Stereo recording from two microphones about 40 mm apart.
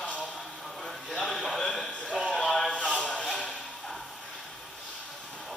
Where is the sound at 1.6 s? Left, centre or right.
Centre.